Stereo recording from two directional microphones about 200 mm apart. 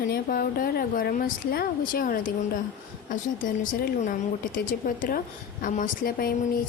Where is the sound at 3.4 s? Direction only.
45° left (ahead or behind).